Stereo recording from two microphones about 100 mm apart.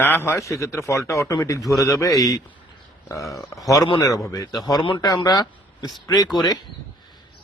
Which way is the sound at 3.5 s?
35° left (ahead or behind).